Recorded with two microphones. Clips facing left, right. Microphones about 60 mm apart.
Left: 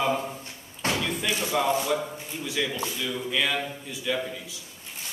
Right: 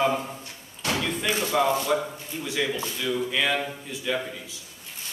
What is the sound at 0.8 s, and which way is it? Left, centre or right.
Slam, left.